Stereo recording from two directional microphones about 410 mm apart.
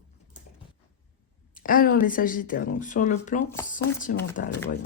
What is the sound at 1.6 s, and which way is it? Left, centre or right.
Speech, left.